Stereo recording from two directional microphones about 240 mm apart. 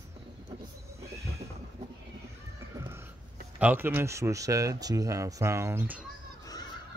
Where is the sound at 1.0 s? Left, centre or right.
Centre.